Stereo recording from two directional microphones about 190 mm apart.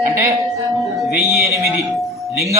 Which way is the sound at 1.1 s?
15° right (ahead or behind).